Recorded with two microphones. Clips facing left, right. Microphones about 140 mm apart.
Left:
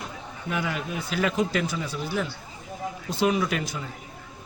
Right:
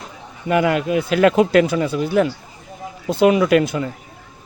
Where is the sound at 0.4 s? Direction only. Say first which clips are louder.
Right 12 dB; 70° right (ahead or behind).